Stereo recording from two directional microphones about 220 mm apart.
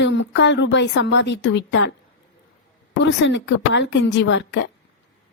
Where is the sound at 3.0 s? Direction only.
55° left (ahead or behind).